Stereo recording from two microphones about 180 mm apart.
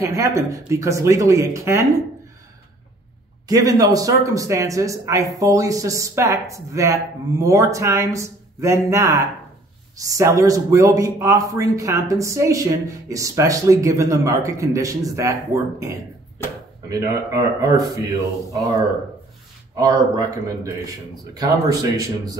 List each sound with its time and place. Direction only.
0.0 s speech: 15° right (ahead or behind)
3.4 s speech: 20° right (ahead or behind)
16.4 s speech: 10° left (ahead or behind)
16.9 s speech: 20° right (ahead or behind)